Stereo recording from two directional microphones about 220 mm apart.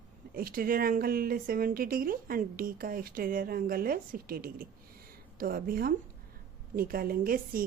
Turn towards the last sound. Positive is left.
turn(degrees=-40)  # may be behind; listen again after turning